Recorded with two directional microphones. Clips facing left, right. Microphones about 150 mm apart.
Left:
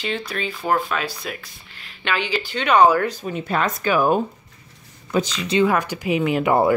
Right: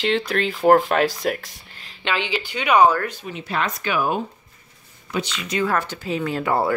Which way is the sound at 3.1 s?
40° left (ahead or behind).